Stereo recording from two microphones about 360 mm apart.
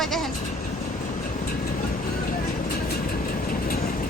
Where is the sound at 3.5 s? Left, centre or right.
Left.